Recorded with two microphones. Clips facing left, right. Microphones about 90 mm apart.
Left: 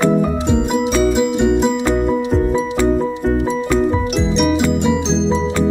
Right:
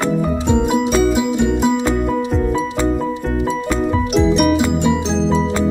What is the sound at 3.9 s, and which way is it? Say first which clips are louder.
Music: right 2 dB; centre (ahead or behind).